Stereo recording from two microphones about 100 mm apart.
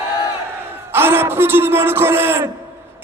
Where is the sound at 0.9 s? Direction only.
25° right (ahead or behind).